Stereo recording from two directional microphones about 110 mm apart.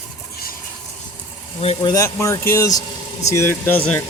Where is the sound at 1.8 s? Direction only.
35° left (ahead or behind).